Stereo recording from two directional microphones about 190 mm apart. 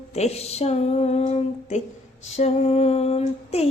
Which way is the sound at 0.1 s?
35° left (ahead or behind).